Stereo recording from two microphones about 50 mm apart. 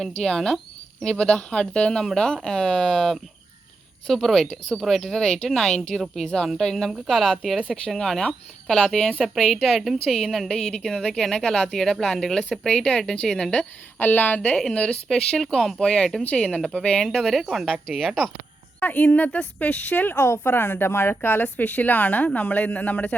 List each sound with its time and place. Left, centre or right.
0.0 s a woman's voice: centre
10.5 s speech: centre
14.0 s a woman's voice: left
14.7 s a woman's voice: centre
16.2 s speech: left
17.1 s a woman's voice: centre
17.9 s a woman's voice: centre
18.8 s a woman's voice: left
20.1 s speech: left
21.4 s a woman's voice: left